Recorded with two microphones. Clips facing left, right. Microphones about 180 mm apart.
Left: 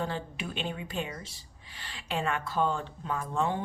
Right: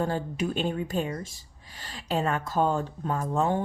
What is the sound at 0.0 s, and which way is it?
A woman's voice, 45° right (ahead or behind).